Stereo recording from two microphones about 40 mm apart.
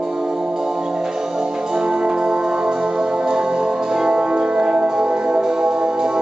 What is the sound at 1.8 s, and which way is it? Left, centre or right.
Music, centre.